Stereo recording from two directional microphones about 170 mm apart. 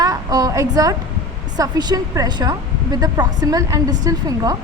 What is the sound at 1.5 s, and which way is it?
Speech, 20° right (ahead or behind).